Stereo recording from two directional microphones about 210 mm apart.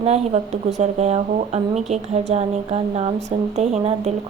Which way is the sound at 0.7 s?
30° right (ahead or behind).